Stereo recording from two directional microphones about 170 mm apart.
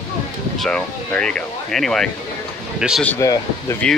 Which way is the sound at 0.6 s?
5° left (ahead or behind).